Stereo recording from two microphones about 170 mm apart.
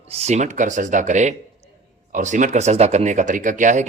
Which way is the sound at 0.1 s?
40° right (ahead or behind).